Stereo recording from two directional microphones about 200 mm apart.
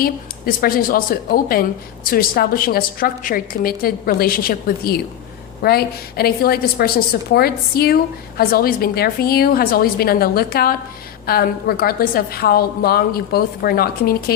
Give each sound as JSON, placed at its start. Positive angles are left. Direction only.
{"t": 0.0, "sound": "a woman's voice", "side_deg": 45}